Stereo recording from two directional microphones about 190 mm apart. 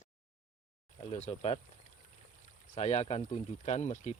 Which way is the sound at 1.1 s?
35° left (ahead or behind).